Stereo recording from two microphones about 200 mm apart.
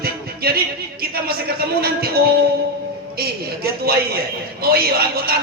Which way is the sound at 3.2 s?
50° right (ahead or behind).